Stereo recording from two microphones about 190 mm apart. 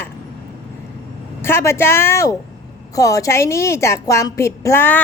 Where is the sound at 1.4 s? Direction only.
15° left (ahead or behind).